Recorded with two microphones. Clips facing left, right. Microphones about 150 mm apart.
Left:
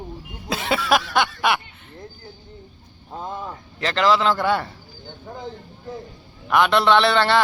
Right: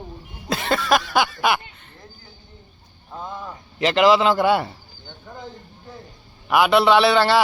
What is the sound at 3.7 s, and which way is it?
Speech, 15° right (ahead or behind).